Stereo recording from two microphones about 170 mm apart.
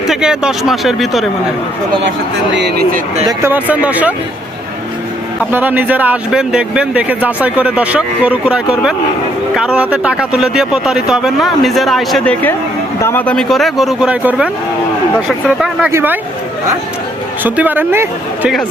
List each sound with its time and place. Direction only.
0.1 s speech: 5° right (ahead or behind)
2.0 s speech: 90° right
3.2 s speech: 10° right (ahead or behind)
5.4 s speech: 10° right (ahead or behind)
15.9 s speech: 15° right (ahead or behind)
17.4 s speech: 10° right (ahead or behind)